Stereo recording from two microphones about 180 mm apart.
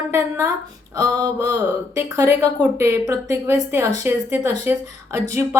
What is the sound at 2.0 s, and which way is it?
A woman's voice, 15° right (ahead or behind).